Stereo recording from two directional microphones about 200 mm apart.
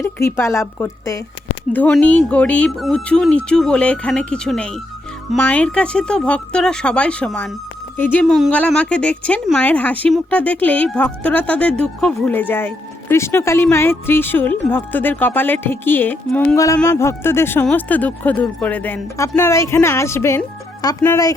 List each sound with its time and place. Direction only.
0.2 s speech: 15° left (ahead or behind)